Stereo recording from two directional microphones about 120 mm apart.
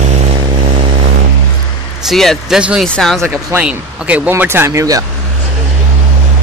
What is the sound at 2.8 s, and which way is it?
Speech, 5° left (ahead or behind).